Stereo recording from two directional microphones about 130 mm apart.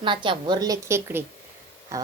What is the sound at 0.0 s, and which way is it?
A woman's voice, 40° right (ahead or behind).